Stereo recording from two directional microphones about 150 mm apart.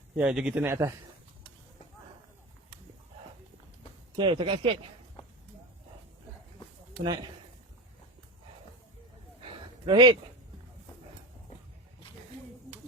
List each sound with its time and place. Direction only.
0.2 s a man's voice: 5° right (ahead or behind)
4.1 s speech: 30° right (ahead or behind)
7.0 s speech: 30° right (ahead or behind)
9.8 s speech: 30° right (ahead or behind)